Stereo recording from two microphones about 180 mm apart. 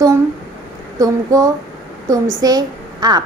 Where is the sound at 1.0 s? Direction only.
20° right (ahead or behind).